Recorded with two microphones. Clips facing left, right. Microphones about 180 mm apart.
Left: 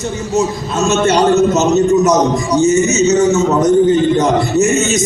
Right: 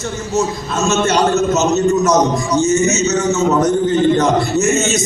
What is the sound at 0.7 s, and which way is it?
A man's voice, 15° left (ahead or behind).